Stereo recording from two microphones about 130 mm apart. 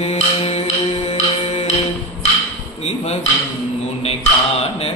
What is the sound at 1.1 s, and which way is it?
Music, 60° left (ahead or behind).